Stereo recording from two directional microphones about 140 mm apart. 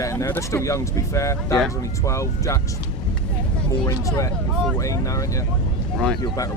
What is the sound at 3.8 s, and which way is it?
Speech, 25° left (ahead or behind).